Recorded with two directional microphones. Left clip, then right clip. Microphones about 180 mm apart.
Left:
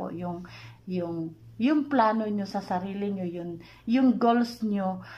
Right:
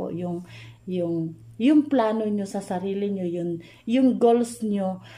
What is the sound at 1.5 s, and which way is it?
A woman's voice, 45° right (ahead or behind).